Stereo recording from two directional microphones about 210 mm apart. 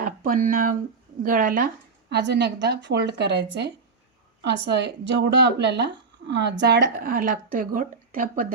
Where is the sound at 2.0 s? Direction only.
55° right (ahead or behind).